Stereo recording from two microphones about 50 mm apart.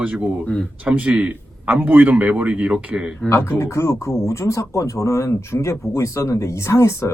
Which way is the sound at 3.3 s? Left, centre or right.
Left.